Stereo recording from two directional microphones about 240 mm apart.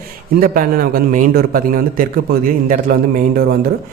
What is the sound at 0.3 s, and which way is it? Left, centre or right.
A man's voice, right.